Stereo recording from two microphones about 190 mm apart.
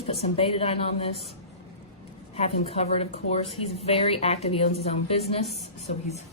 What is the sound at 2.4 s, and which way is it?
A woman's voice, 35° left (ahead or behind).